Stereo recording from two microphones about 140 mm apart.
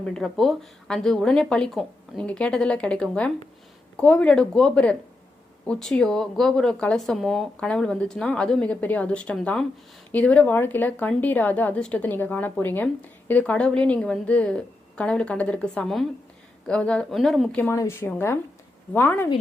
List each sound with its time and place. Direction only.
0.0 s a woman's voice: 5° left (ahead or behind)
17.6 s a woman's voice: 20° left (ahead or behind)